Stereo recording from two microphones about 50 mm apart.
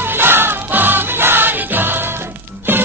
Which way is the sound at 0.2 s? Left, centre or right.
Right.